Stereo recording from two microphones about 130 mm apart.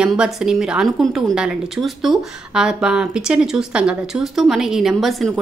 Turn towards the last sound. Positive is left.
turn(degrees=0)  # may be behind; listen again after turning